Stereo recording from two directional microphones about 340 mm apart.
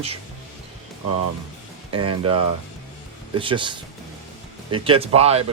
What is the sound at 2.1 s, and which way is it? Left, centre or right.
Speech, centre.